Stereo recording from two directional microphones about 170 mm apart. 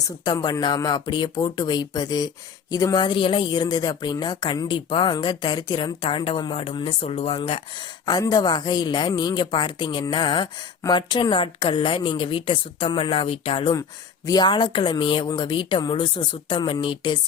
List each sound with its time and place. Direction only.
0.0 s speech: 25° left (ahead or behind)
8.0 s speech: 25° left (ahead or behind)